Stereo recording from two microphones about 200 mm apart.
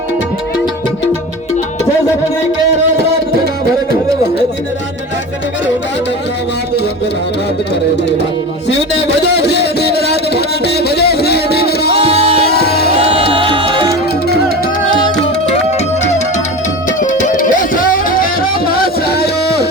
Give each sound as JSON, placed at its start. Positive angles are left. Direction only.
{"t": 8.9, "sound": "a sound", "side_deg": 60}
{"t": 11.9, "sound": "music", "side_deg": -30}
{"t": 12.5, "sound": "music", "side_deg": 50}
{"t": 13.0, "sound": "music", "side_deg": -30}
{"t": 17.0, "sound": "music", "side_deg": 40}